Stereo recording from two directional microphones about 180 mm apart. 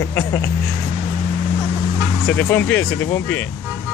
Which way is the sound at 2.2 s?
10° left (ahead or behind).